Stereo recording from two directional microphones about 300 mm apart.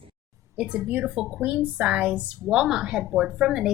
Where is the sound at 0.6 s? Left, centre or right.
Centre.